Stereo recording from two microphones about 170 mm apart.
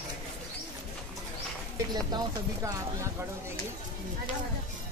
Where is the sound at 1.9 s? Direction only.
25° right (ahead or behind).